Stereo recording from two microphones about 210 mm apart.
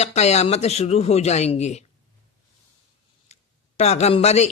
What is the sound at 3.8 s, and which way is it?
Speech, 30° left (ahead or behind).